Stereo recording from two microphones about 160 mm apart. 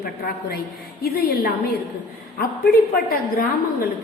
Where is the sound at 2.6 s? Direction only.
65° left (ahead or behind).